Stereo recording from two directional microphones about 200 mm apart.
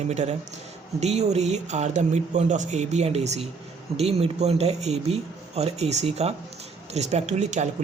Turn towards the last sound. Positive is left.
turn(degrees=-35)  # may be behind; listen again after turning